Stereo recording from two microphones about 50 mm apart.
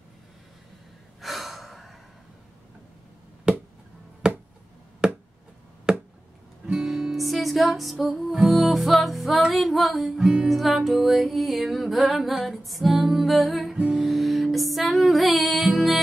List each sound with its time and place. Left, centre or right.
1.2 s gasp: centre
3.5 s a sound: centre
6.6 s music: centre